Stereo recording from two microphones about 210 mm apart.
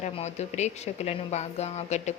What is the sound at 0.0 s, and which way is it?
A woman's voice, 30° left (ahead or behind).